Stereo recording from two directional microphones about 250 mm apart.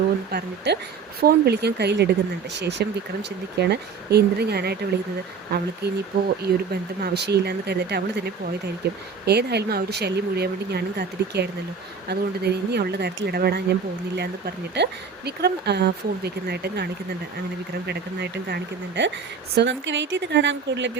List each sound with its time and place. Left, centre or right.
0.3 s speech: right
6.1 s speech: right